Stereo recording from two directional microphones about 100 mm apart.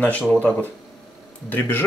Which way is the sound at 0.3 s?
15° left (ahead or behind).